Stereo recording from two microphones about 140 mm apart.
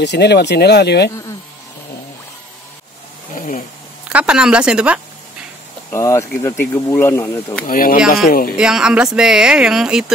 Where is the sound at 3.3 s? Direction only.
70° left (ahead or behind).